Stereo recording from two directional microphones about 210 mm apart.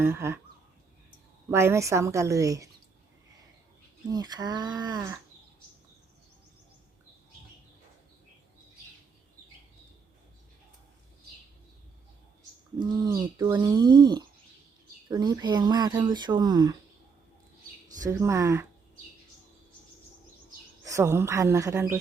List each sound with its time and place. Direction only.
0.0 s a woman's voice: 10° right (ahead or behind)
1.5 s a woman's voice: 15° right (ahead or behind)
4.1 s speech: 20° right (ahead or behind)
12.8 s speech: 20° right (ahead or behind)
18.0 s a woman's voice: 15° right (ahead or behind)
20.8 s a woman's voice: 15° right (ahead or behind)